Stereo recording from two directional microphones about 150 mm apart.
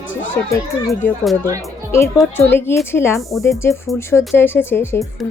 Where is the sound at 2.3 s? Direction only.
15° left (ahead or behind).